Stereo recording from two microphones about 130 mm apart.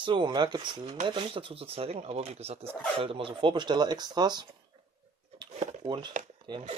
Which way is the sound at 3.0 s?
40° right (ahead or behind).